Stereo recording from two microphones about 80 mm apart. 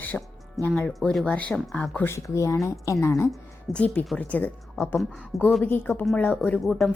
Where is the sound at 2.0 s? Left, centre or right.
Left.